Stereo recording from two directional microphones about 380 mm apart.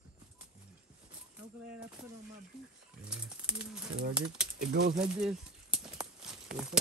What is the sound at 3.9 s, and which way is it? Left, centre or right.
Speech, centre.